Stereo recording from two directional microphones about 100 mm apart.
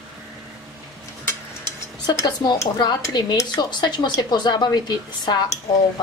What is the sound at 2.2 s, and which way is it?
Speech, 45° left (ahead or behind).